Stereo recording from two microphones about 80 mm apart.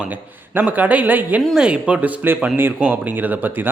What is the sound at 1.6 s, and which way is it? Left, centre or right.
Speech, centre.